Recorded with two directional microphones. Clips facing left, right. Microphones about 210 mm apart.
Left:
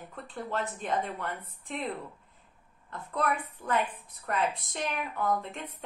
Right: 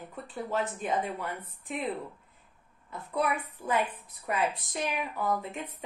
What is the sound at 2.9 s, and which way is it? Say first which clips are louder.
A woman's voice: right 1 dB; 5° right (ahead or behind).